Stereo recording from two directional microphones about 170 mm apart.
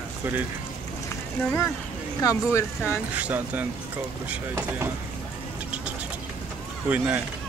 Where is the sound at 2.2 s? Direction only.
20° left (ahead or behind).